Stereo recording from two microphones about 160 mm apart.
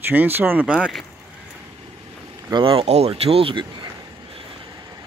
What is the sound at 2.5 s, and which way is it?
Speech, 35° right (ahead or behind).